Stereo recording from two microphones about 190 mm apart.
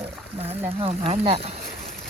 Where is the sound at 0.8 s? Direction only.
30° right (ahead or behind).